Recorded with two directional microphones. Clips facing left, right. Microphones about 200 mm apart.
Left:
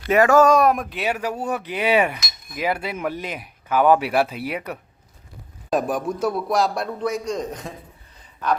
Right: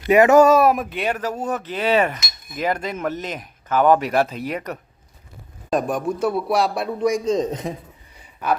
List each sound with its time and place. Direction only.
0.0 s speech: 20° right (ahead or behind)
0.4 s cutlery: 5° right (ahead or behind)
2.2 s cutlery: centre (ahead or behind)
5.7 s speech: centre (ahead or behind)
7.3 s a man's voice: 20° right (ahead or behind)
8.1 s a sound: 10° right (ahead or behind)